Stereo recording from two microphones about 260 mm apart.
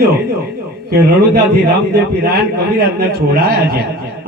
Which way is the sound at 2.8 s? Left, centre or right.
Right.